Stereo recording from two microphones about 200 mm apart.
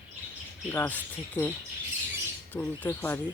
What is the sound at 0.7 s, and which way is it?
Speech, 10° left (ahead or behind).